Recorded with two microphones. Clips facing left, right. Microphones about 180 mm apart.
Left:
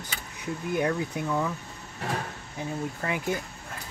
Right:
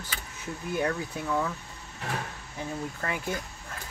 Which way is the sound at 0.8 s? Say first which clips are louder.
Left 2 dB; 20° left (ahead or behind).